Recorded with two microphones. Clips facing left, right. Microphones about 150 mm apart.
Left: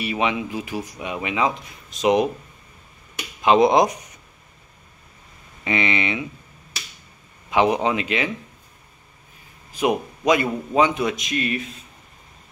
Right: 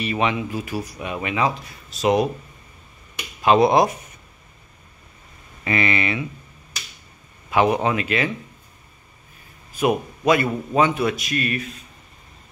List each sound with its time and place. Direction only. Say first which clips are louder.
0.0 s speech: right 1 dB; 10° left (ahead or behind)
3.4 s speech: even; 20° left (ahead or behind)
5.6 s a man's voice: right 1 dB; 20° left (ahead or behind)
7.5 s speech: even; 15° left (ahead or behind)
9.8 s a man's voice: right 1 dB; 15° left (ahead or behind)